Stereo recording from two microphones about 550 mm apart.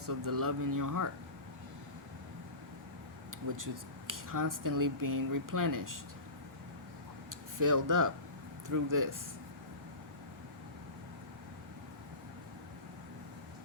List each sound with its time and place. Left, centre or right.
0.0 s speech: right
3.5 s speech: right
7.3 s speech: right